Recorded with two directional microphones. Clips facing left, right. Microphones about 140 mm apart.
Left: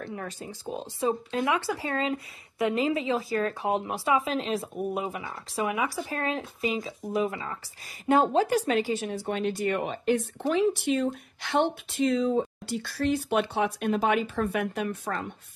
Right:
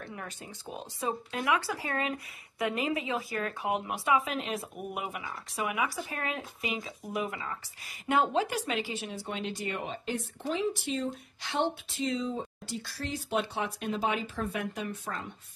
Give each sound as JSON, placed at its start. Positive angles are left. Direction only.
{"t": 0.1, "sound": "speech", "side_deg": 35}